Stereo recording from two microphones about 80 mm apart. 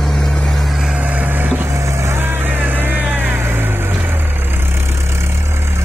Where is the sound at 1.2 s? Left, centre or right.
Right.